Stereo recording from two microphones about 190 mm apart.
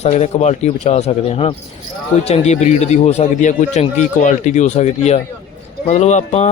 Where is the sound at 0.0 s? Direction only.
35° left (ahead or behind).